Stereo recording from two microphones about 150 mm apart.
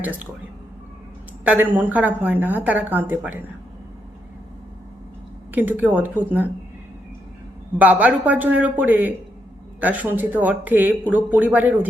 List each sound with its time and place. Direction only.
1.5 s speech: 10° right (ahead or behind)
5.5 s speech: 10° right (ahead or behind)
7.8 s speech: 10° right (ahead or behind)